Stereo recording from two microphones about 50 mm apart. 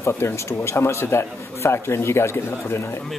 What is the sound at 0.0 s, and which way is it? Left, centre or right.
A man's voice, left.